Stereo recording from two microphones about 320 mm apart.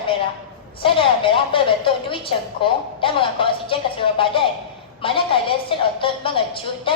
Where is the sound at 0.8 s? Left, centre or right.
Centre.